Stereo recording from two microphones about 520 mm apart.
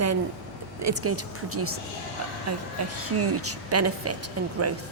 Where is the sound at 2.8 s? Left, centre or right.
Right.